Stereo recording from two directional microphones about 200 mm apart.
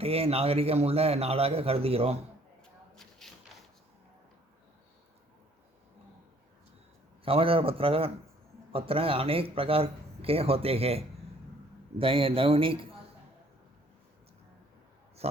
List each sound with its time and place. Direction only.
0.0 s a man's voice: 30° right (ahead or behind)
2.9 s a sound: centre (ahead or behind)
7.3 s a man's voice: 30° right (ahead or behind)
15.2 s oink: 30° right (ahead or behind)